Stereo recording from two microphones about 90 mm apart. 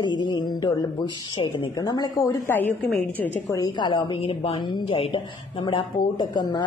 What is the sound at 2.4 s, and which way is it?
Speech, 20° left (ahead or behind).